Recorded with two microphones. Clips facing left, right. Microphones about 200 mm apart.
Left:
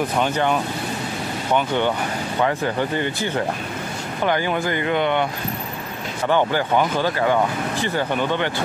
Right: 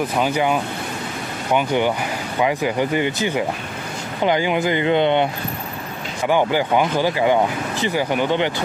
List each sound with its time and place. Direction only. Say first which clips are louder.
0.2 s speech: right 2 dB; 10° right (ahead or behind)
2.4 s speech: right 2 dB; 10° right (ahead or behind)
6.2 s speech: right 2 dB; 10° right (ahead or behind)